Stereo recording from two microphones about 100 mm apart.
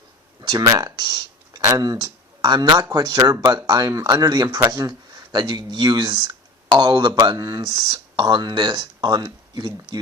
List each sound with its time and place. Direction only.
0.4 s speech: 45° right (ahead or behind)